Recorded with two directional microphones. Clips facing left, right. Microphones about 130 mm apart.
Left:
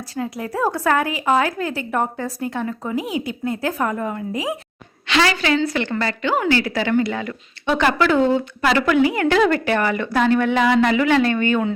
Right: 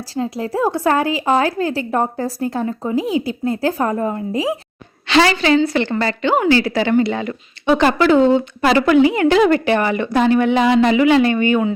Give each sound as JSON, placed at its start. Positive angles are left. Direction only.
{"t": 0.1, "sound": "a woman's voice", "side_deg": -25}